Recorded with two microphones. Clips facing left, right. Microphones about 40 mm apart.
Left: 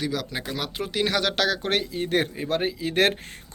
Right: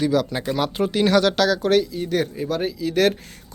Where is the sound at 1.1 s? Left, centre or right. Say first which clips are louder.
Right 6 dB; centre; by 3.1 s left.